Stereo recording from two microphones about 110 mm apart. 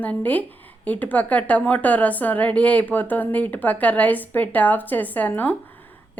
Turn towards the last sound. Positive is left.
turn(degrees=15)  # may be behind; listen again after turning